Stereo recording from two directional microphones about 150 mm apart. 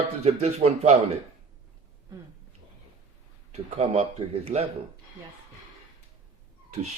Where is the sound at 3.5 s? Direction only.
45° right (ahead or behind).